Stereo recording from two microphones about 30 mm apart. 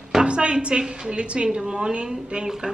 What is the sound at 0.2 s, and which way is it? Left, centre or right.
A woman's voice, right.